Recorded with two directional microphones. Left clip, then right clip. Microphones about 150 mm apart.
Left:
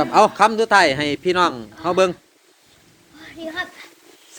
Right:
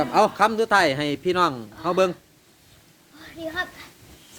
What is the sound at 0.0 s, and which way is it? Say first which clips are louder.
A man's voice: left 5 dB; centre (ahead or behind).